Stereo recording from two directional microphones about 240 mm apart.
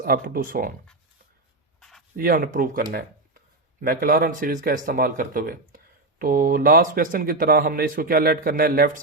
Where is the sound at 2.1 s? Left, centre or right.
Right.